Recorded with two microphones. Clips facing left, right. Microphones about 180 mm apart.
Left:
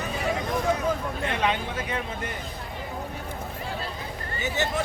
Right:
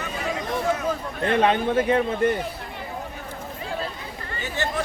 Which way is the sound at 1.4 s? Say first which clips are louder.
Right 10 dB; 50° right (ahead or behind).